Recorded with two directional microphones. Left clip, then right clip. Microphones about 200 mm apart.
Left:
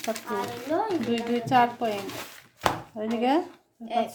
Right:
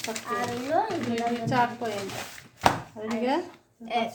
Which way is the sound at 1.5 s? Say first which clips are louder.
Left 5 dB; 60° left (ahead or behind).